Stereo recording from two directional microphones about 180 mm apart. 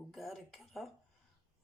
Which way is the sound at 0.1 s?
Centre (ahead or behind).